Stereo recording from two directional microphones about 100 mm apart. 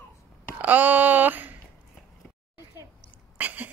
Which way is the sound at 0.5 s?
15° right (ahead or behind).